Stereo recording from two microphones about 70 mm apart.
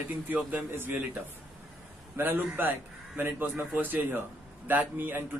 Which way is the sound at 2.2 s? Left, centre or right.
Right.